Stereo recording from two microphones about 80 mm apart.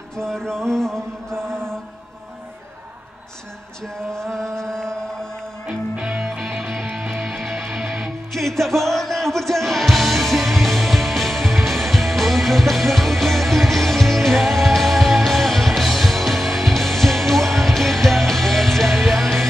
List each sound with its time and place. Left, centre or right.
0.1 s mantra: centre
1.3 s mantra: right
3.8 s mantra: centre
5.7 s music: centre